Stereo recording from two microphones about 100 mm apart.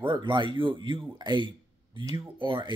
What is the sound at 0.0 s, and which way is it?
Speech, 55° right (ahead or behind).